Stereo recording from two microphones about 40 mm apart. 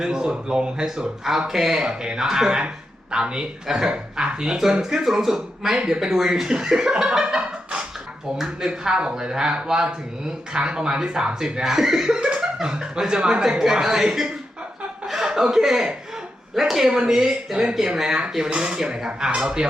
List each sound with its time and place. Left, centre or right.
0.0 s speech: centre
0.9 s speech: centre
1.9 s speech: centre
5.7 s speech: centre
12.1 s speech: right